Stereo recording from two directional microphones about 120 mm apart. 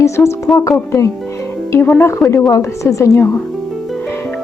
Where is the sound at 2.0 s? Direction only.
20° left (ahead or behind).